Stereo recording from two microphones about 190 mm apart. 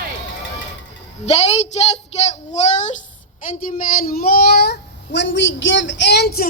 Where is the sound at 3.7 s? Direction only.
50° left (ahead or behind).